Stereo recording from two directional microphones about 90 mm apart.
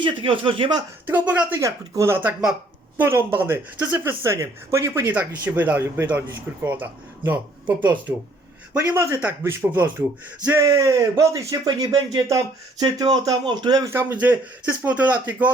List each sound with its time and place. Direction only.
0.0 s speech: 80° right
1.0 s speech: 20° right (ahead or behind)
1.5 s speech: 35° right (ahead or behind); by 7.3 s 20° right (ahead or behind)
8.8 s speech: 30° right (ahead or behind)
10.6 s speech: 40° right (ahead or behind)
13.8 s speech: 25° right (ahead or behind)